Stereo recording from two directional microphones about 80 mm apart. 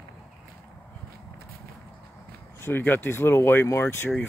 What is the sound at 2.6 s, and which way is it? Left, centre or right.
Speech, left.